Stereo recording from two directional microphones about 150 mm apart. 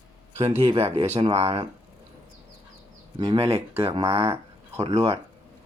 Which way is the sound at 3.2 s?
35° right (ahead or behind).